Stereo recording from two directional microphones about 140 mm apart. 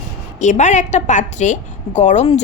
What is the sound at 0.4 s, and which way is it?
A woman's voice, 55° left (ahead or behind).